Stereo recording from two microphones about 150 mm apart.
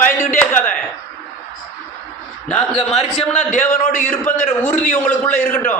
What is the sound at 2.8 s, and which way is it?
Speech, 45° left (ahead or behind).